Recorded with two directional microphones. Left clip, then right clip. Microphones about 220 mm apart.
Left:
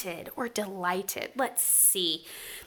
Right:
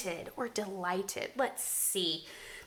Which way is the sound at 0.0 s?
30° left (ahead or behind).